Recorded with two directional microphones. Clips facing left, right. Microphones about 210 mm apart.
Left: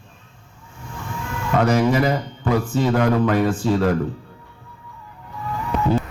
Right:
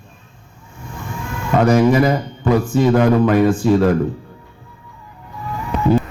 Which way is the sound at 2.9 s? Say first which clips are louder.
Right 4 dB; 45° right (ahead or behind).